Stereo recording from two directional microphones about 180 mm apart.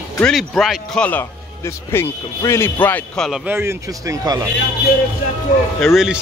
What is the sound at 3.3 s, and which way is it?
Speech, 10° right (ahead or behind).